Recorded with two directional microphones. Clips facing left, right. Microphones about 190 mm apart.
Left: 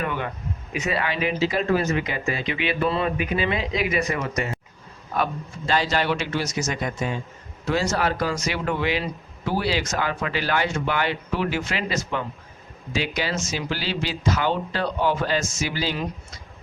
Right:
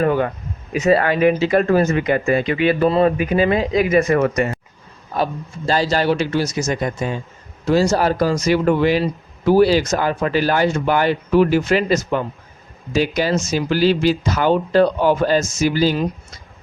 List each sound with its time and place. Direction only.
0.0 s speech: 40° right (ahead or behind)
5.1 s a man's voice: 35° right (ahead or behind)